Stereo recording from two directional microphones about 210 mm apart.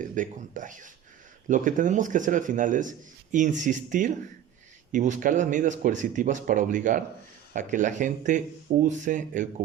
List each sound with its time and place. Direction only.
0.0 s speech: 40° right (ahead or behind)